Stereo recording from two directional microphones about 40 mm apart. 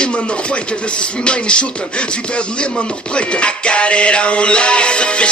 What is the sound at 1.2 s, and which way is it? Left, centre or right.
Speech, left.